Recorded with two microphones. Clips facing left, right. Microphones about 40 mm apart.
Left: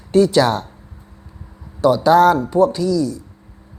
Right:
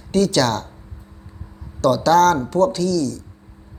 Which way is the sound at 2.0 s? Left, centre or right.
Centre.